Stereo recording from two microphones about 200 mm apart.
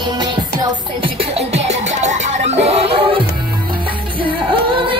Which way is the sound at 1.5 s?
35° right (ahead or behind).